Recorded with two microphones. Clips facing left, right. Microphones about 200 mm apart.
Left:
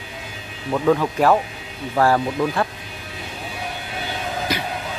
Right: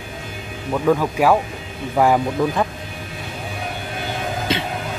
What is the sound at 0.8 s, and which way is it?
Speech, 5° right (ahead or behind).